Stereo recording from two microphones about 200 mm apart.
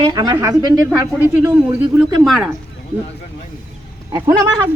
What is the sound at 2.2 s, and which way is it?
Speech, centre (ahead or behind).